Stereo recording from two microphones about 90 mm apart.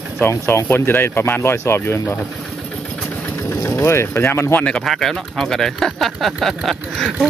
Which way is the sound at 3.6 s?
30° left (ahead or behind).